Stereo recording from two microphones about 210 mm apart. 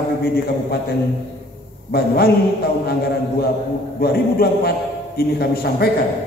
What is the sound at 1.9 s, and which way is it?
Speech, 50° left (ahead or behind).